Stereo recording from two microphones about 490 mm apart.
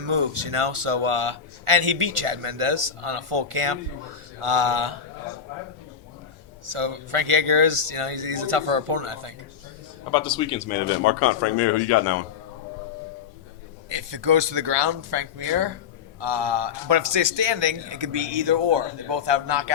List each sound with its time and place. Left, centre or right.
0.0 s a man's voice: right
4.4 s a sound: right
6.7 s a man's voice: right
10.1 s speech: centre; by 12.2 s left
13.9 s a man's voice: right